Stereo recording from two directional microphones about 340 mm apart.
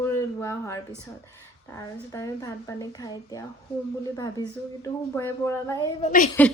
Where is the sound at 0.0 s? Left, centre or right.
Centre.